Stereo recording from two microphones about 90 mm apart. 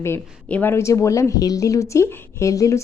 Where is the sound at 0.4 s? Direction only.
15° left (ahead or behind).